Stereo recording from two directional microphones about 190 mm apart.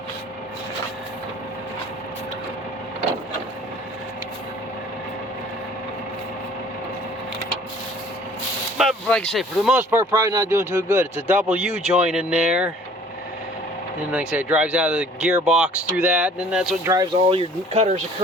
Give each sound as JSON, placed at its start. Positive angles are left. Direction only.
{"t": 8.8, "sound": "speech", "side_deg": 0}
{"t": 9.7, "sound": "speech", "side_deg": -15}
{"t": 14.1, "sound": "speech", "side_deg": -5}
{"t": 17.2, "sound": "speech", "side_deg": -30}